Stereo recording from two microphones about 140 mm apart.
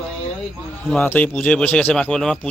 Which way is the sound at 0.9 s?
10° left (ahead or behind).